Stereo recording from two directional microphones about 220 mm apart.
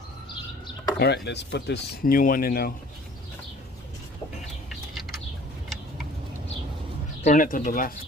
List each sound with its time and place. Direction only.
0.9 s speech: 50° left (ahead or behind)
4.7 s bird: centre (ahead or behind)
7.3 s speech: 35° left (ahead or behind)